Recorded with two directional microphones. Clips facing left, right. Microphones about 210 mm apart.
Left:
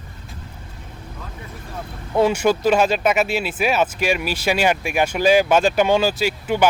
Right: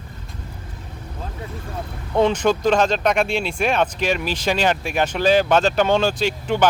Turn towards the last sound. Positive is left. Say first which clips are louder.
# even
turn(degrees=5)  # may be behind; listen again after turning